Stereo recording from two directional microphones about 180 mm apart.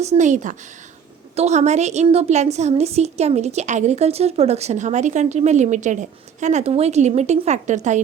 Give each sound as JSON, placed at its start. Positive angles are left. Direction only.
{"t": 0.0, "sound": "a woman's voice", "side_deg": -40}